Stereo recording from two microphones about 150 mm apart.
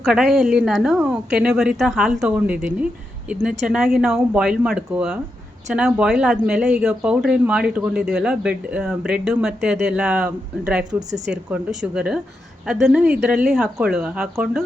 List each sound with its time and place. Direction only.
0.0 s a woman's voice: 5° right (ahead or behind)